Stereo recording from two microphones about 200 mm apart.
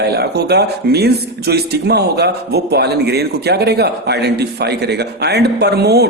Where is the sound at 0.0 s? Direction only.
55° right (ahead or behind).